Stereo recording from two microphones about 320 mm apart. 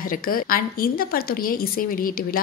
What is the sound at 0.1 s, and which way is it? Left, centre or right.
A woman's voice, left.